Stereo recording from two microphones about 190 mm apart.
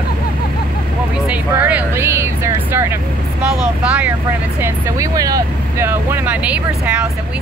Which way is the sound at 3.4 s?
5° right (ahead or behind).